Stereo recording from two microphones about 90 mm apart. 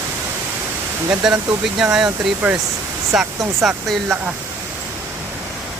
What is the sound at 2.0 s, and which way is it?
Speech, 15° right (ahead or behind).